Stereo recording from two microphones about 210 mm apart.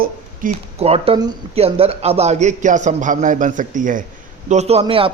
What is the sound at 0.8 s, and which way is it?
A man's voice, 30° right (ahead or behind).